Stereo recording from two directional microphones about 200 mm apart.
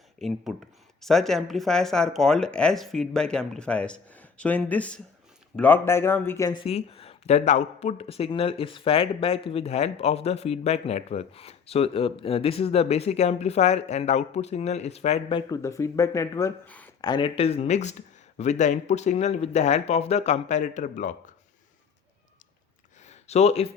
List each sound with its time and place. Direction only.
0.2 s speech: centre (ahead or behind)
17.0 s speech: 20° left (ahead or behind); by 21.3 s 40° left (ahead or behind)
23.0 s speech: 30° left (ahead or behind)